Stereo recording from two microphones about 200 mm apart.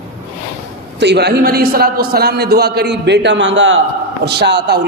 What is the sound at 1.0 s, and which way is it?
A man's voice, 55° right (ahead or behind).